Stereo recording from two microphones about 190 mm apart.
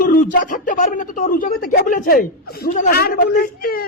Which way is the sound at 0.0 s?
45° left (ahead or behind).